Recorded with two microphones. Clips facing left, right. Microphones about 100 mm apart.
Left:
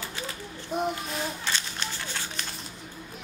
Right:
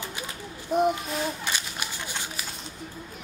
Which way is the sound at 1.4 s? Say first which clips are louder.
Even; 15° right (ahead or behind).